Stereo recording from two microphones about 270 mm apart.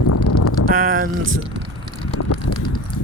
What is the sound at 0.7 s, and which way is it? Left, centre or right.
Speech, right.